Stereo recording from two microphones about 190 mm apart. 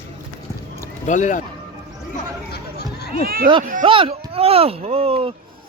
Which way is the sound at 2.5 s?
60° left (ahead or behind).